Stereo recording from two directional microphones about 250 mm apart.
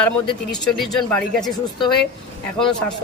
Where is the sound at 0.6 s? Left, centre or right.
Centre.